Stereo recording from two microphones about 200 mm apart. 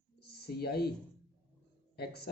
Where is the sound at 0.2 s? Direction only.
55° left (ahead or behind).